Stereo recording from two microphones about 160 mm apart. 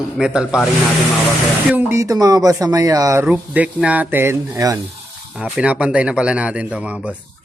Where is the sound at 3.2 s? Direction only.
10° right (ahead or behind).